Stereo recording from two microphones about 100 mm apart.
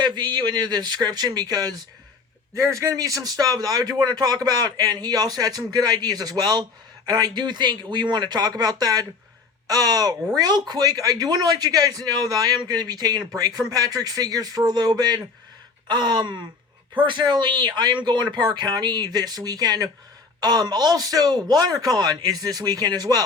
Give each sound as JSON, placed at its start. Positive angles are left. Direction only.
{"t": 0.0, "sound": "speech", "side_deg": -45}
{"t": 2.6, "sound": "a man's voice", "side_deg": -30}